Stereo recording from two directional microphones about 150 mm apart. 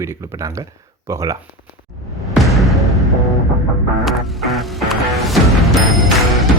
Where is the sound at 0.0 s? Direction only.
15° right (ahead or behind).